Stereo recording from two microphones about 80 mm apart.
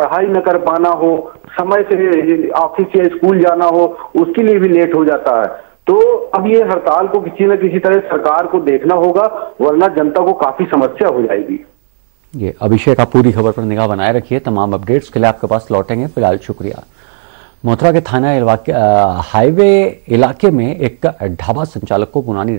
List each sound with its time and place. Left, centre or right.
0.0 s a man's voice: centre
8.5 s speech: centre
8.9 s a man's voice: centre
12.6 s a man's voice: centre
18.1 s a man's voice: centre
21.4 s speech: centre
21.8 s a man's voice: centre